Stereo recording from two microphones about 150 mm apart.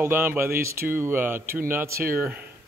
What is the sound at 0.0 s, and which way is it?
Speech, 15° right (ahead or behind).